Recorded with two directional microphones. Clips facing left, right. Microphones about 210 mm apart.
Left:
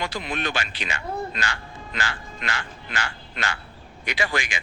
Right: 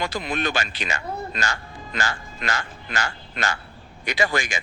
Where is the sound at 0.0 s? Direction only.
40° right (ahead or behind).